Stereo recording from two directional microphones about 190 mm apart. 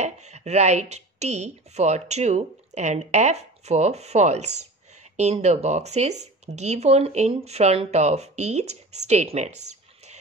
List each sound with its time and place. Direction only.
0.0 s speech: 35° right (ahead or behind)